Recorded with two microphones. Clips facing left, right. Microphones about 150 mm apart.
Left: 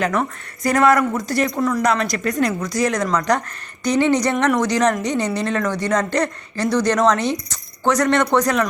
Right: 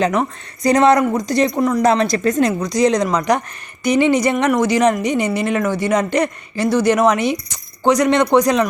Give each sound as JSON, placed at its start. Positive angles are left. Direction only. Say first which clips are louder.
{"t": 0.0, "sound": "a woman's voice", "louder": "right 3 dB", "side_deg": -20}